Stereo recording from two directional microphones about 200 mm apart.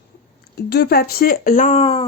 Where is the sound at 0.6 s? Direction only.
50° left (ahead or behind); by 2.0 s 30° left (ahead or behind).